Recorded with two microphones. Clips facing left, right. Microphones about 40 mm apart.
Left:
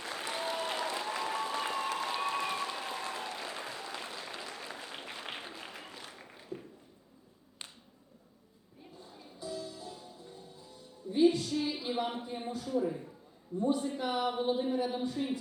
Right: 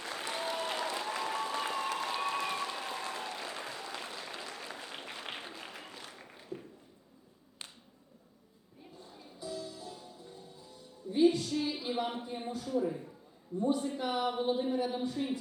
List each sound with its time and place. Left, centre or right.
0.0 s applause: centre
7.6 s finger snapping: left
9.0 s music: centre
11.8 s a man's voice: centre